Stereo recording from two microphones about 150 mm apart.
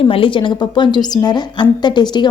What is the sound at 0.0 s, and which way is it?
A woman's voice, 35° left (ahead or behind).